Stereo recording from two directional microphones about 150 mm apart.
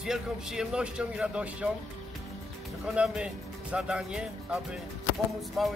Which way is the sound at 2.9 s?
5° right (ahead or behind).